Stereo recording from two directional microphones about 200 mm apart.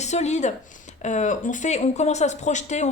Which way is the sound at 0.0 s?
35° left (ahead or behind).